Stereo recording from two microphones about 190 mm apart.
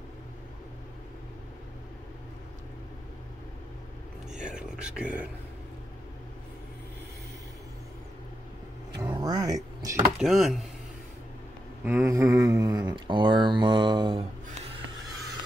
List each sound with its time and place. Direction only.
4.4 s speech: 5° right (ahead or behind)
9.0 s vehicle: 20° right (ahead or behind)
9.8 s a sound: 20° right (ahead or behind)
10.1 s speech: centre (ahead or behind)
11.8 s speech: 10° right (ahead or behind)